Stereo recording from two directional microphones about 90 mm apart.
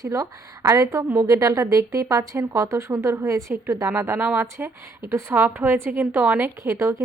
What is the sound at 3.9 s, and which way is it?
A woman's voice, 20° right (ahead or behind).